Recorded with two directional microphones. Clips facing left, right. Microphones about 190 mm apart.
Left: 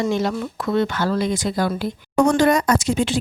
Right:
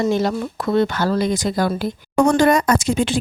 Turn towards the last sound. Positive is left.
turn(degrees=-50)  # may be behind; listen again after turning